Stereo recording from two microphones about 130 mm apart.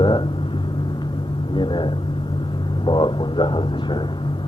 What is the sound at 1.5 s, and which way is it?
Speech, 40° left (ahead or behind).